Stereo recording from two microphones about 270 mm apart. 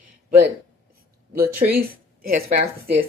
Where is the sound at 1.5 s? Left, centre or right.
Right.